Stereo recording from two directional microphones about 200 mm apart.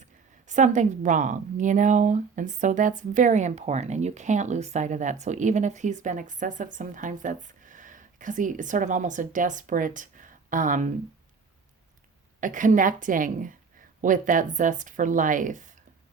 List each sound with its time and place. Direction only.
0.4 s a woman's voice: 35° right (ahead or behind)
12.4 s a woman's voice: 40° right (ahead or behind)